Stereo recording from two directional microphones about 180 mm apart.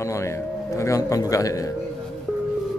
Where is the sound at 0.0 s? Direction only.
15° left (ahead or behind).